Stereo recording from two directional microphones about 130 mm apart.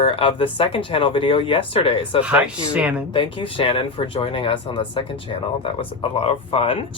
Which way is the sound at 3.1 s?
45° left (ahead or behind).